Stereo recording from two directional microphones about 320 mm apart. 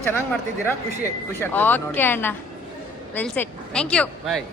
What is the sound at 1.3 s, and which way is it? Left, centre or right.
Speech, centre.